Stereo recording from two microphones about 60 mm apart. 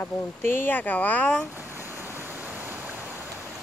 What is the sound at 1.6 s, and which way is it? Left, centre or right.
Waves, right.